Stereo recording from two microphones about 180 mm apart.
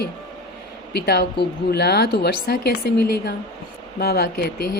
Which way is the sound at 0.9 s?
65° left (ahead or behind).